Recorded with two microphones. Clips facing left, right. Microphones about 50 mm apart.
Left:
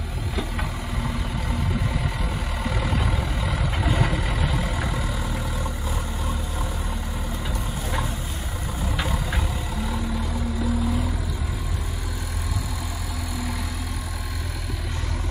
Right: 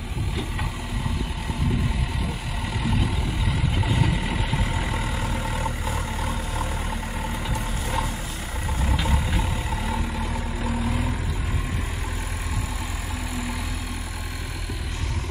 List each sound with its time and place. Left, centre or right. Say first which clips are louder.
2.6 s vehicle: even; centre
4.3 s vehicle: even; centre
4.9 s vehicle: right 1 dB; right
10.6 s vehicle: left 2 dB; right